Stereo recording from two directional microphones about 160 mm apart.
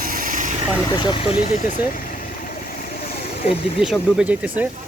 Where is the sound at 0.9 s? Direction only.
30° left (ahead or behind).